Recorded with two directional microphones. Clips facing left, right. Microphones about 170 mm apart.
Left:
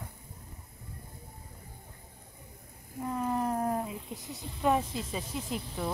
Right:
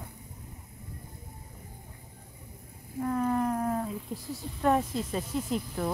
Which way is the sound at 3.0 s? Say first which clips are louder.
Right 4 dB; 10° left (ahead or behind).